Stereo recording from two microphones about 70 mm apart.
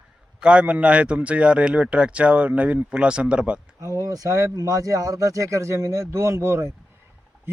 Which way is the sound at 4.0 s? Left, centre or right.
Right.